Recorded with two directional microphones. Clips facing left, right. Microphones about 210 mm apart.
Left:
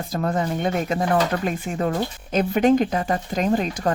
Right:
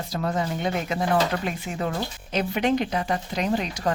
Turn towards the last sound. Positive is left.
turn(degrees=45)  # may be behind; listen again after turning